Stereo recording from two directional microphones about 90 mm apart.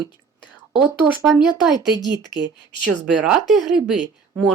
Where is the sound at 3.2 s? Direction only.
5° right (ahead or behind).